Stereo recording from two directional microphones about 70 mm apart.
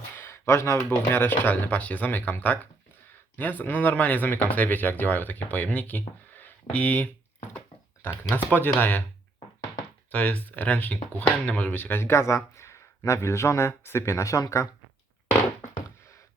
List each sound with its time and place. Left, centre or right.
0.2 s speech: left
3.6 s speech: left
8.0 s speech: left
10.1 s speech: centre; by 14.7 s left